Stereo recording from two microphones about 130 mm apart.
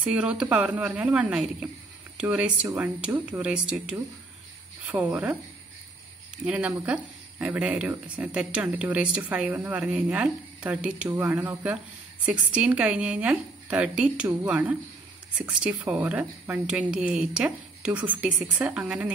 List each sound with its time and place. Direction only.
0.0 s speech: 10° right (ahead or behind)